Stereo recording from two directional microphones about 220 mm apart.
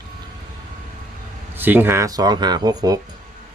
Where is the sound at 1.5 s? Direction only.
10° right (ahead or behind).